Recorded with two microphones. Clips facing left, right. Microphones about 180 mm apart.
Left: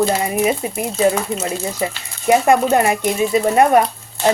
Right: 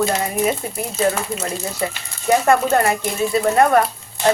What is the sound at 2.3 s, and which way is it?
Speech, 15° left (ahead or behind).